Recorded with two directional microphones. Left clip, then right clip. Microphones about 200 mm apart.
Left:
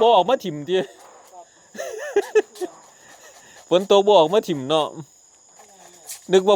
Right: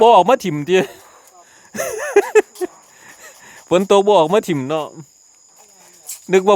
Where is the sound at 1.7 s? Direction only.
35° right (ahead or behind).